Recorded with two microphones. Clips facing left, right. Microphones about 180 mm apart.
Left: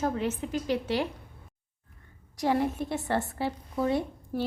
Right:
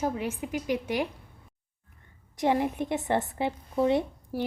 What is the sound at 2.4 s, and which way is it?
A woman's voice, 15° right (ahead or behind).